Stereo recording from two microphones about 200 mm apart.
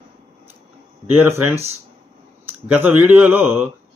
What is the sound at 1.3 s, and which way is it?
Speech, 30° right (ahead or behind).